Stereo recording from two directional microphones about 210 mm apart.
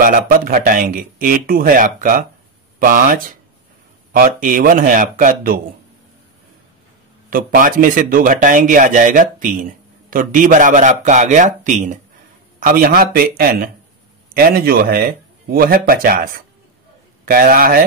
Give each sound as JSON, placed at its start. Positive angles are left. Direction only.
{"t": 0.0, "sound": "speech", "side_deg": -40}
{"t": 7.2, "sound": "speech", "side_deg": -40}